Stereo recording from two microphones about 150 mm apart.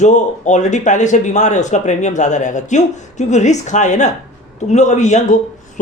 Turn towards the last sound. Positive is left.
turn(degrees=50)  # may be behind; listen again after turning